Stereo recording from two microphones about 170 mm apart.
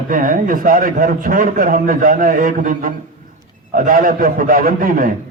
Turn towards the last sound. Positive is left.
turn(degrees=-55)  # may be behind; listen again after turning